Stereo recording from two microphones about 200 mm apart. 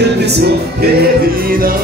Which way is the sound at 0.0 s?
55° right (ahead or behind).